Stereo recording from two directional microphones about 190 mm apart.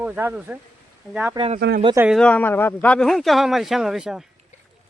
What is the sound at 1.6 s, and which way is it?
Speech, 60° right (ahead or behind).